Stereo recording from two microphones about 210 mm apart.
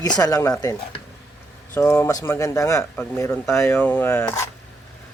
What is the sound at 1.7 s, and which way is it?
Speech, 10° left (ahead or behind).